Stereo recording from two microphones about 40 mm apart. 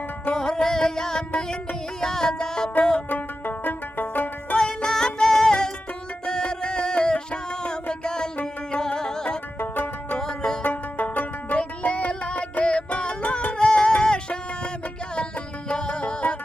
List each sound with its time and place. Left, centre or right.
0.3 s music: centre
3.1 s music: left
4.5 s music: left
9.6 s music: left
10.2 s music: centre
10.6 s music: left
11.5 s music: left
15.7 s music: left